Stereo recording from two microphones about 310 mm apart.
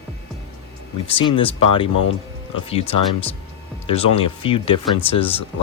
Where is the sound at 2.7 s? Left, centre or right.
Centre.